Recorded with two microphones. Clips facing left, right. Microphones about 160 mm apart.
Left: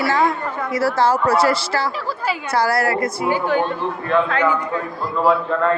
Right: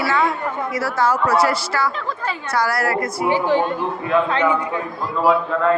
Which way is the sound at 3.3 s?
30° right (ahead or behind).